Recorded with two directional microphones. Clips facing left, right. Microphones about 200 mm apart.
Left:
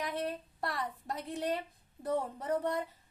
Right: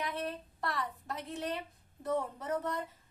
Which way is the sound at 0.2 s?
15° left (ahead or behind).